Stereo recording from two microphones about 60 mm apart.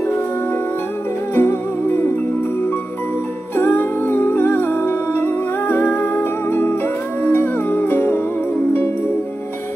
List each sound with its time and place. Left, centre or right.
1.3 s music: left
3.5 s music: left